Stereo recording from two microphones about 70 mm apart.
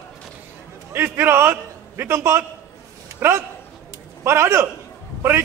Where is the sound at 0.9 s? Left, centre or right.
Right.